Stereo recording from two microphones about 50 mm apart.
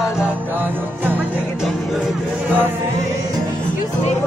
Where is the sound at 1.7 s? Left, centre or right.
Centre.